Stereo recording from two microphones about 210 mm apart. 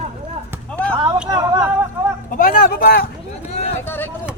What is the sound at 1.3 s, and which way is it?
Speech, 20° right (ahead or behind).